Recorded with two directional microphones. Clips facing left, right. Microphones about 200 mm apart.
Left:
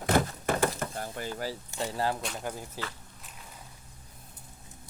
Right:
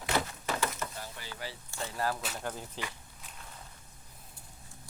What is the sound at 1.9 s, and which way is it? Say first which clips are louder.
Speech: left 3 dB; 30° left (ahead or behind).